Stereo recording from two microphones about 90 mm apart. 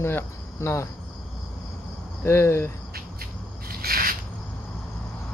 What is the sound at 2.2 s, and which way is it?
Speech, 30° left (ahead or behind).